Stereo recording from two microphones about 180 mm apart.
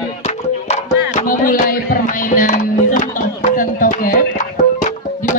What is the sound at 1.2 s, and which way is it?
Music, 50° left (ahead or behind).